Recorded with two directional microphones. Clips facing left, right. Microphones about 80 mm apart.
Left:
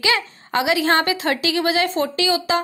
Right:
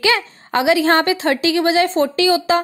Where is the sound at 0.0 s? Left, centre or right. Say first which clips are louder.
Right 3 dB; right.